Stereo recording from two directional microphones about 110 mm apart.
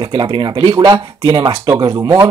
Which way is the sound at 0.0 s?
45° right (ahead or behind).